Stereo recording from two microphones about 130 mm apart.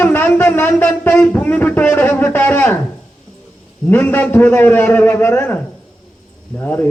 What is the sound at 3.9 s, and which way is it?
A man's voice, 15° left (ahead or behind).